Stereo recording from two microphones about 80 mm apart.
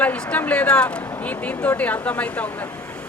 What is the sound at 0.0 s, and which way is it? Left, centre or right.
A man's voice, centre.